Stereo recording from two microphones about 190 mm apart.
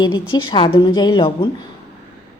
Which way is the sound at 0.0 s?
25° left (ahead or behind).